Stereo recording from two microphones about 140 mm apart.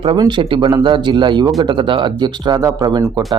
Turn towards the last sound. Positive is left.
turn(degrees=-25)  # may be behind; listen again after turning